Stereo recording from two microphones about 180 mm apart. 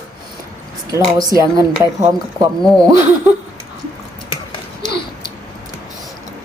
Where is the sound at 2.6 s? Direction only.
5° left (ahead or behind).